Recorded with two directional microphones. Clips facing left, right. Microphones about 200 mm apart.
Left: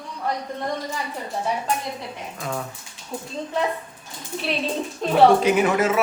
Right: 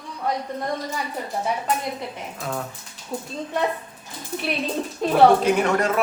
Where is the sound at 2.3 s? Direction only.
Centre (ahead or behind).